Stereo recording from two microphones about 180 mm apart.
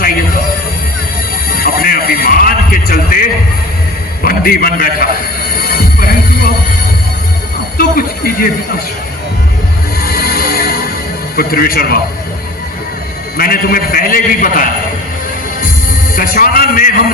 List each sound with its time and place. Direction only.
1.5 s a sound: 55° left (ahead or behind)
4.2 s a man's voice: 55° left (ahead or behind)
5.5 s music: 55° left (ahead or behind)
7.8 s a sound: 55° left (ahead or behind)
10.0 s music: 55° left (ahead or behind)
11.3 s speech: 55° left (ahead or behind)
13.3 s a man's voice: 55° left (ahead or behind)
16.1 s a man's voice: 50° left (ahead or behind)